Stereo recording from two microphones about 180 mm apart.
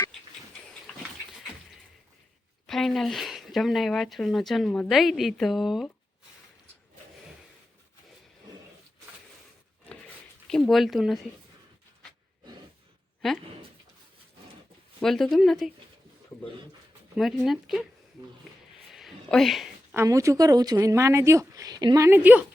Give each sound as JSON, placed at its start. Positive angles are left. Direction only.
{"t": 0.9, "sound": "dog", "side_deg": 5}
{"t": 2.6, "sound": "speech", "side_deg": 0}
{"t": 10.5, "sound": "speech", "side_deg": 0}
{"t": 15.0, "sound": "speech", "side_deg": 0}
{"t": 17.2, "sound": "speech", "side_deg": 0}
{"t": 18.9, "sound": "a sound", "side_deg": 0}
{"t": 20.0, "sound": "a woman's voice", "side_deg": -15}